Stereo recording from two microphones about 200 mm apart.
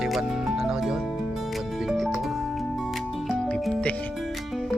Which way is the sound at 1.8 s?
Centre (ahead or behind).